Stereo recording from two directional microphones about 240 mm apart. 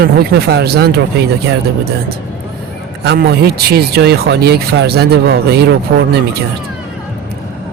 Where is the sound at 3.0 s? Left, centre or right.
Right.